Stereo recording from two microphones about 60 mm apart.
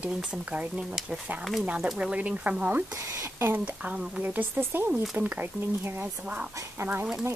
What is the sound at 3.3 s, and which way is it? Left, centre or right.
Speech, right.